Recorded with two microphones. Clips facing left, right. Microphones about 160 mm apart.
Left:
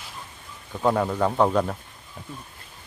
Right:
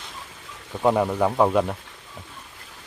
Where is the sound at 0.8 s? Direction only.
10° right (ahead or behind).